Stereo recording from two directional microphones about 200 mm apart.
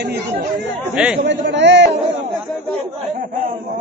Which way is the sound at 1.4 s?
60° right (ahead or behind).